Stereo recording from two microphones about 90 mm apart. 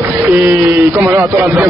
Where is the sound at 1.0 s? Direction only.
30° right (ahead or behind).